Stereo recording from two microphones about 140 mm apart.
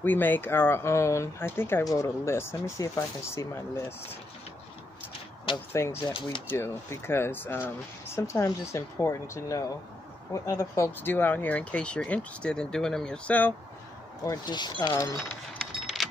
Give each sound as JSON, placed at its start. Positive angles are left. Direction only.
{"t": 0.0, "sound": "speech", "side_deg": 15}
{"t": 5.7, "sound": "speech", "side_deg": 20}
{"t": 6.0, "sound": "speech", "side_deg": 35}
{"t": 6.5, "sound": "speech", "side_deg": 15}
{"t": 14.2, "sound": "speech", "side_deg": 30}
{"t": 15.1, "sound": "a sound", "side_deg": 5}